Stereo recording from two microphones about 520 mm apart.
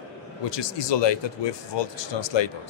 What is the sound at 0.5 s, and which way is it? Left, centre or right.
A man's voice, left.